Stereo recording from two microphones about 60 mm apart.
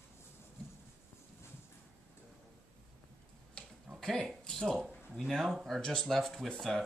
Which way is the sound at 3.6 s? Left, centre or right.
Centre.